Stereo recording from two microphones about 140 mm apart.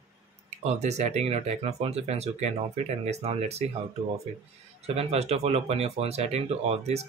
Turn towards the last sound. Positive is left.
turn(degrees=-50)  # may be behind; listen again after turning